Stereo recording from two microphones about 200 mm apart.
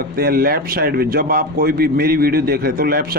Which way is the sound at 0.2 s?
50° right (ahead or behind).